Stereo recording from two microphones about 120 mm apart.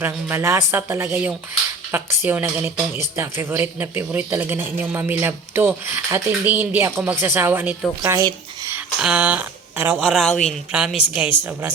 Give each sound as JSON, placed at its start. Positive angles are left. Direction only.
{"t": 0.0, "sound": "speech", "side_deg": -20}
{"t": 8.1, "sound": "a sound", "side_deg": -25}
{"t": 9.0, "sound": "speech", "side_deg": -5}
{"t": 10.1, "sound": "speech", "side_deg": 0}
{"t": 10.7, "sound": "speech", "side_deg": -10}